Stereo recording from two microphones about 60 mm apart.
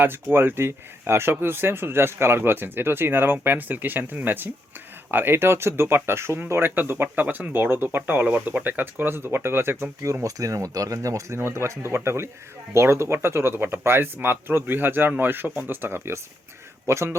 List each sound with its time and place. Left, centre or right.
0.0 s speech: right
10.2 s speech: right
11.3 s speech: right